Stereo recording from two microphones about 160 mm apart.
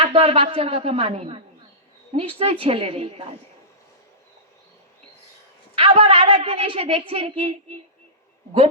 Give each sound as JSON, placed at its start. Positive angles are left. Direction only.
{"t": 0.0, "sound": "a woman's voice", "side_deg": -35}
{"t": 5.7, "sound": "a woman's voice", "side_deg": -35}